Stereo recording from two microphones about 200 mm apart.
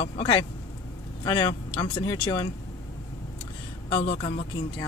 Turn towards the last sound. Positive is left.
turn(degrees=25)  # may be behind; listen again after turning